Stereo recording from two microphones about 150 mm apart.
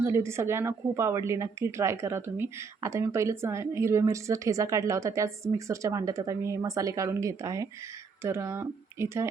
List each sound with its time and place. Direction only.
0.0 s a woman's voice: 20° right (ahead or behind)